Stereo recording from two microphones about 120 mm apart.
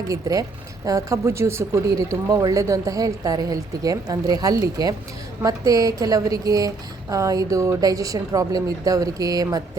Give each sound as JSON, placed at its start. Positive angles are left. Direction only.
{"t": 0.1, "sound": "a woman's voice", "side_deg": -30}